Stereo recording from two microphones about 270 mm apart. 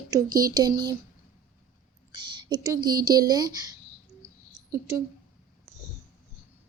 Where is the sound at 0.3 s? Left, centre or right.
Right.